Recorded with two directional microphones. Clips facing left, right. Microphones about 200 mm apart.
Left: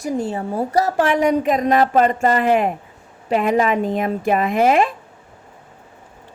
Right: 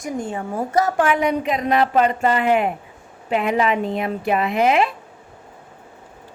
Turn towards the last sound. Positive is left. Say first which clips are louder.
# left 2 dB
turn(degrees=45)  # may be behind; listen again after turning